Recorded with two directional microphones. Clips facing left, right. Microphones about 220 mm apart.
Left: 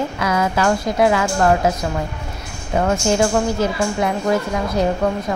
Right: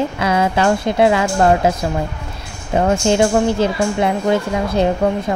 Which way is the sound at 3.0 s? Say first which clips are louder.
Right 3 dB; 30° right (ahead or behind).